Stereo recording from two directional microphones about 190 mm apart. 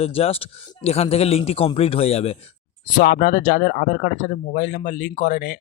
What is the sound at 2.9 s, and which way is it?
Speech, 50° left (ahead or behind).